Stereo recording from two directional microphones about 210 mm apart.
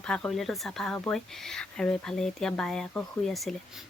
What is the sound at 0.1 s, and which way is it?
Speech, 5° left (ahead or behind).